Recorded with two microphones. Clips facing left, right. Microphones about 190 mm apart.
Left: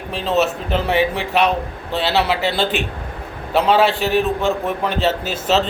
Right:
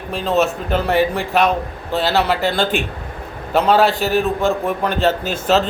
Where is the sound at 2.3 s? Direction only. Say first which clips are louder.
Right 1 dB; 45° right (ahead or behind).